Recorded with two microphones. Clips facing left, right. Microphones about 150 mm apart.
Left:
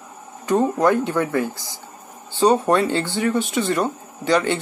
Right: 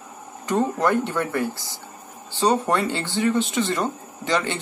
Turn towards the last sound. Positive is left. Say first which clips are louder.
# left 5 dB
turn(degrees=15)  # may be behind; listen again after turning